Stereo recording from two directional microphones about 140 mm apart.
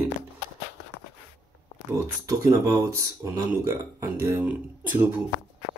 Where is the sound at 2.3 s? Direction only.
25° right (ahead or behind).